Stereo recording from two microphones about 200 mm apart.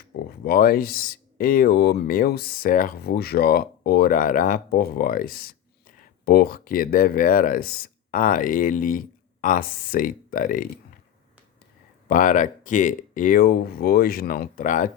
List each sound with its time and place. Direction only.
0.3 s speech: 50° left (ahead or behind)
12.0 s speech: 40° left (ahead or behind)